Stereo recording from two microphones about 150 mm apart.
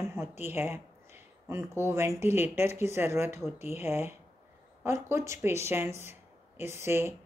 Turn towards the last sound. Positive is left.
turn(degrees=-15)  # may be behind; listen again after turning